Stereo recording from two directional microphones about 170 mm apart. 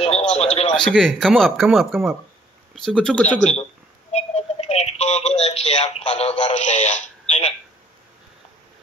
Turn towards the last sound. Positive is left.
turn(degrees=40)  # may be behind; listen again after turning